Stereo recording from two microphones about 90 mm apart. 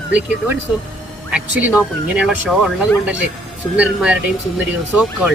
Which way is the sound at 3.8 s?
15° right (ahead or behind).